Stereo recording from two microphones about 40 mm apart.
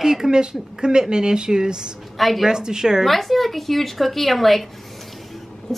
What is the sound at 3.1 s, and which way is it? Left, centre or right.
A woman's voice, centre.